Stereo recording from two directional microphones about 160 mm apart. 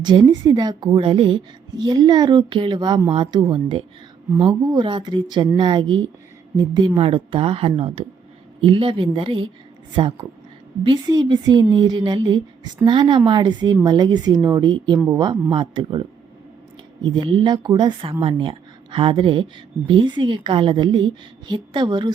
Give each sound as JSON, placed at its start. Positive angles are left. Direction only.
{"t": 0.0, "sound": "a woman's voice", "side_deg": -30}